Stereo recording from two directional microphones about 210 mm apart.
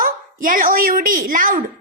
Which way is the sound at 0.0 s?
40° right (ahead or behind).